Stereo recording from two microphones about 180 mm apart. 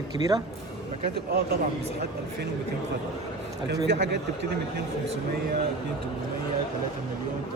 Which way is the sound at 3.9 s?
70° right (ahead or behind).